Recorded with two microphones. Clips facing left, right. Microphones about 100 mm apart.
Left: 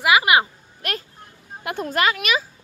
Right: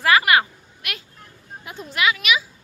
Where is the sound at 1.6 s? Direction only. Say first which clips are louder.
Left 9 dB; 60° left (ahead or behind).